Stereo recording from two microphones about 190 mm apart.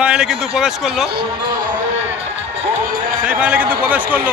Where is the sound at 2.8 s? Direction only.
45° right (ahead or behind).